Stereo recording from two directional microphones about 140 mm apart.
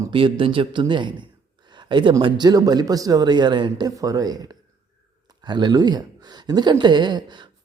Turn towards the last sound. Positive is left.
turn(degrees=-30)  # may be behind; listen again after turning